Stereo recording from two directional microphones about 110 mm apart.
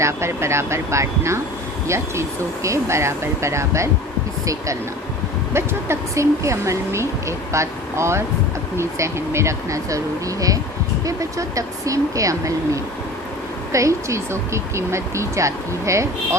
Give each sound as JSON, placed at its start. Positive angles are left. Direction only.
{"t": 0.0, "sound": "a woman's voice", "side_deg": -25}
{"t": 2.6, "sound": "a woman's voice", "side_deg": -25}